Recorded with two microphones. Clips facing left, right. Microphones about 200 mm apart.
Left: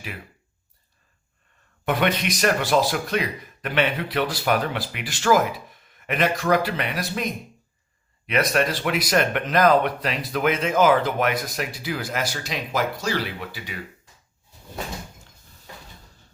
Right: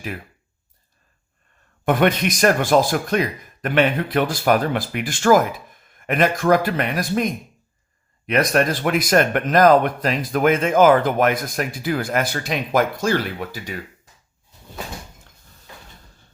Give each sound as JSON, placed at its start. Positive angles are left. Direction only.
{"t": 1.8, "sound": "speech", "side_deg": -50}
{"t": 8.3, "sound": "speech", "side_deg": -45}